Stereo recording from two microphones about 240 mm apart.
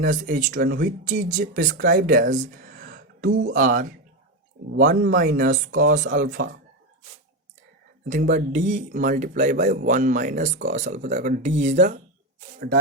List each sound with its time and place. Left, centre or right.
0.0 s speech: right
3.2 s speech: right
3.5 s speech: right
8.0 s speech: right